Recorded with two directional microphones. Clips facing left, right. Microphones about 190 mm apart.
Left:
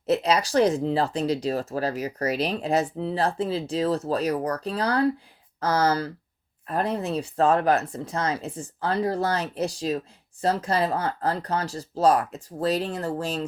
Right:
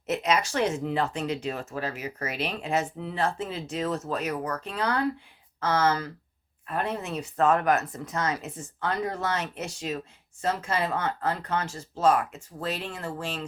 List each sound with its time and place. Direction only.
0.0 s speech: 35° left (ahead or behind)